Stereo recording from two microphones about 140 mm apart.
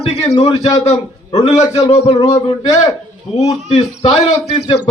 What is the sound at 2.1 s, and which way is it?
Speech, 25° left (ahead or behind).